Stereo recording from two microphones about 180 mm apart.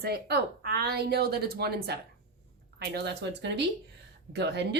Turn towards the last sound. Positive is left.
turn(degrees=-70)  # may be behind; listen again after turning